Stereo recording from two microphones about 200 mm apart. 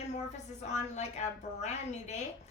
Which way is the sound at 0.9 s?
35° left (ahead or behind).